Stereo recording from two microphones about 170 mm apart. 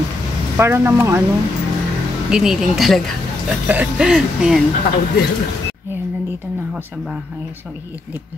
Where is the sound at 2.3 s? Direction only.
5° right (ahead or behind).